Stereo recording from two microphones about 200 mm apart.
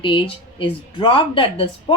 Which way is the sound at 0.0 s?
25° left (ahead or behind).